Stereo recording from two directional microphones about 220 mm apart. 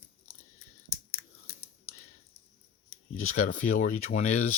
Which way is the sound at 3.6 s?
35° left (ahead or behind).